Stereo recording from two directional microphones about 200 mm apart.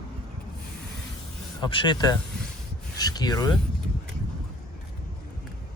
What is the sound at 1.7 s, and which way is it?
Speech, 20° left (ahead or behind).